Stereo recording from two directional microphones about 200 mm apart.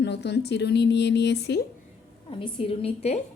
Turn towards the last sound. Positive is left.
turn(degrees=30)  # may be behind; listen again after turning